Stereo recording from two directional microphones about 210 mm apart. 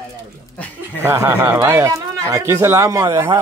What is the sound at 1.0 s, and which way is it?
Speech, 10° right (ahead or behind).